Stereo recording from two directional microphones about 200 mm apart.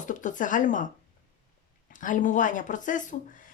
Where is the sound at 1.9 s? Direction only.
40° left (ahead or behind).